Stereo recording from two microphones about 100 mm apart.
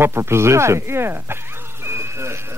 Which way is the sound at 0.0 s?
25° right (ahead or behind).